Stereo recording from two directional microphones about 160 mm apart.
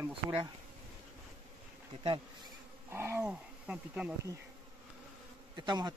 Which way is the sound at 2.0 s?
30° right (ahead or behind).